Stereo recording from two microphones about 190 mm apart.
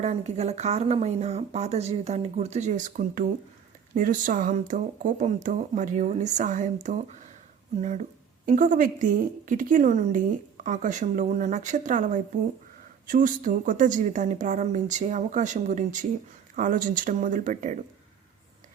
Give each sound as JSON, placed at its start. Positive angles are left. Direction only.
{"t": 0.0, "sound": "a woman's voice", "side_deg": -35}